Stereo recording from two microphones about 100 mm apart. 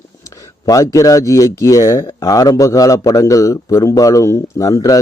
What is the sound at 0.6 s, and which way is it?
A man's voice, 35° left (ahead or behind).